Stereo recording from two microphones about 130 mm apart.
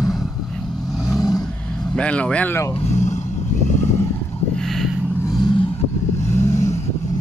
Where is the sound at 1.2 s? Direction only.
30° left (ahead or behind).